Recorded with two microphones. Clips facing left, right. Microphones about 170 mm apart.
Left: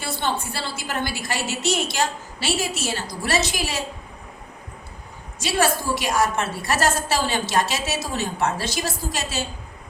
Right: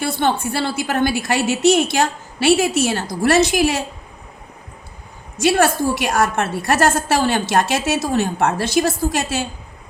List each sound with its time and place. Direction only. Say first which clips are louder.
0.0 s a woman's voice: right 7 dB; 60° right (ahead or behind)
5.4 s a woman's voice: right 6 dB; 55° right (ahead or behind)